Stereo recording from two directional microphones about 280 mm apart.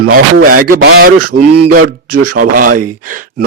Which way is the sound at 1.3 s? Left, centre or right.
Right.